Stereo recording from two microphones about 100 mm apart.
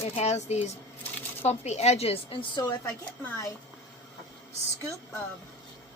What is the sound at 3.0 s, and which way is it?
Speech, 25° left (ahead or behind).